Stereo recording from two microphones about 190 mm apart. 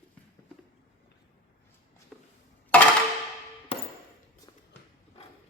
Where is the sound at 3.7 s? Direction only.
30° left (ahead or behind).